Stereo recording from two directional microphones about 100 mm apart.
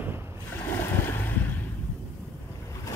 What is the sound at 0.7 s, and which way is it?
Boat, 20° left (ahead or behind).